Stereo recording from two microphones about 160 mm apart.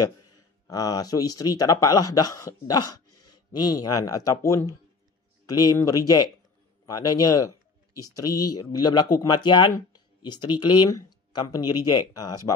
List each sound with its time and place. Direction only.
0.7 s a man's voice: 25° left (ahead or behind)